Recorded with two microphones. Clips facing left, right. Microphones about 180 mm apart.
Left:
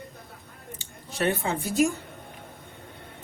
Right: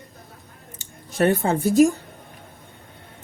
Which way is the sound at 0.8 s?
40° right (ahead or behind).